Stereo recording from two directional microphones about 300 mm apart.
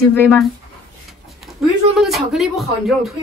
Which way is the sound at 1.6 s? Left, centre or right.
Centre.